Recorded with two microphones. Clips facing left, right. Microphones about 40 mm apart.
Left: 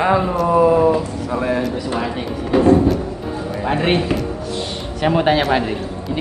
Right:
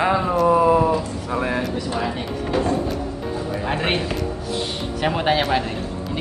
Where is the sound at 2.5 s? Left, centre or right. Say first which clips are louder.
Left 8 dB; centre.